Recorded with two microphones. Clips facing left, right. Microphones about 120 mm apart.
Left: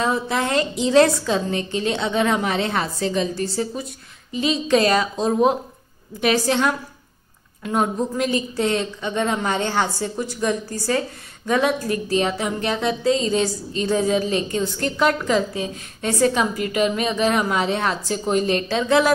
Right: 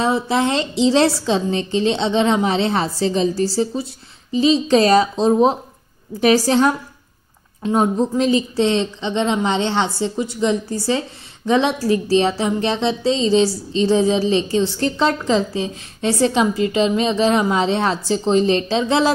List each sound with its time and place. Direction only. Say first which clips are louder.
0.0 s a woman's voice: right 4 dB; 30° right (ahead or behind)